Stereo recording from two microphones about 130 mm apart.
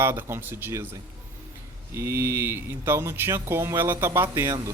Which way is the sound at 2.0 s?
20° right (ahead or behind).